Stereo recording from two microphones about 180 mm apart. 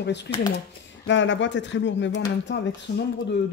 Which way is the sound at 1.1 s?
90° left.